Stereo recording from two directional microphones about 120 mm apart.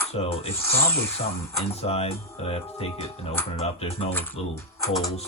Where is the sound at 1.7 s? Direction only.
60° left (ahead or behind).